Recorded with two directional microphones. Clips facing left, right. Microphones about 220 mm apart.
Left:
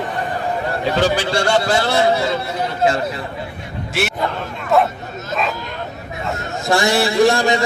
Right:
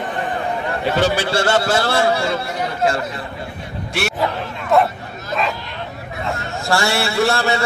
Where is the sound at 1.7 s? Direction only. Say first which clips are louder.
Left 1 dB; 20° left (ahead or behind).